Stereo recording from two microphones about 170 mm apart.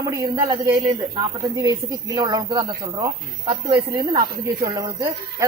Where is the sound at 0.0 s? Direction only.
20° right (ahead or behind).